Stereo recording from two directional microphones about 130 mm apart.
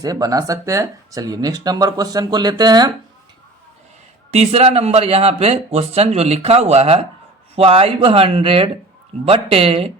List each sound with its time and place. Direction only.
0.0 s speech: 30° right (ahead or behind)
4.3 s speech: 50° right (ahead or behind)